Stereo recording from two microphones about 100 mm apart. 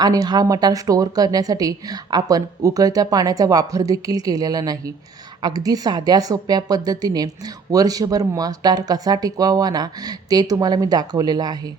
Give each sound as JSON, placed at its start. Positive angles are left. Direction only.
{"t": 0.0, "sound": "a woman's voice", "side_deg": -40}